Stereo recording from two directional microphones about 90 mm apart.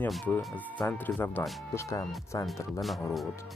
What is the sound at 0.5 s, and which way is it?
Speech, 15° left (ahead or behind).